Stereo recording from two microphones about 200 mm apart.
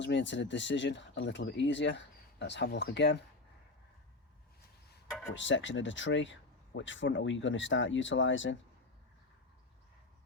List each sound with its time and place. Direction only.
0.0 s speech: 65° left (ahead or behind)
5.3 s speech: 65° left (ahead or behind)